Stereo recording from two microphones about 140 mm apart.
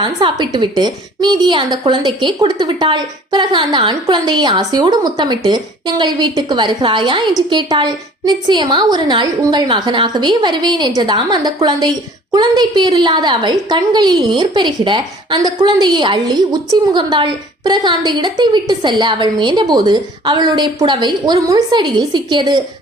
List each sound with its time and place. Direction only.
0.0 s speech: 35° right (ahead or behind)